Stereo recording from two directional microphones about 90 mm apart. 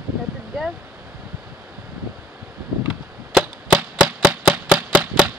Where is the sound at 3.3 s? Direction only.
10° right (ahead or behind).